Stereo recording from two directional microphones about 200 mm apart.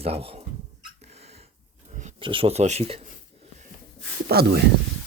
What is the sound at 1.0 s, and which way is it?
Cat, 30° right (ahead or behind).